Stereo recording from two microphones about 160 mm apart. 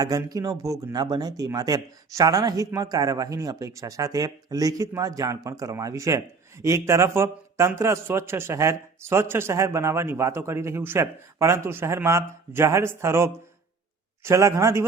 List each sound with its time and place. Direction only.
0.0 s speech: 25° right (ahead or behind)